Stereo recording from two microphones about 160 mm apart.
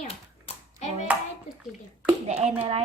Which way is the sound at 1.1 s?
10° right (ahead or behind).